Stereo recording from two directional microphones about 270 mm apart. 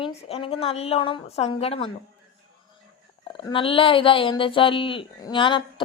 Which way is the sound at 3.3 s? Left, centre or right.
Centre.